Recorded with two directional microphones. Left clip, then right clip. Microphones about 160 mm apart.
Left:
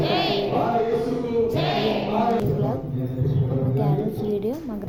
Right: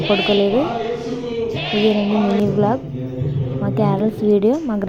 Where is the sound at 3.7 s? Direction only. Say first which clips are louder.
Right 10 dB; 40° right (ahead or behind).